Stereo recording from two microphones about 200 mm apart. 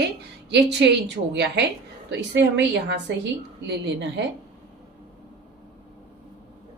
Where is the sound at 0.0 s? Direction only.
60° right (ahead or behind).